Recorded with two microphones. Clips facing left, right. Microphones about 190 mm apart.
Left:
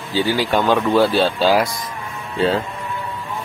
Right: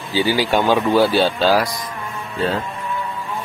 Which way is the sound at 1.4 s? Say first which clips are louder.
Left 2 dB; 20° left (ahead or behind).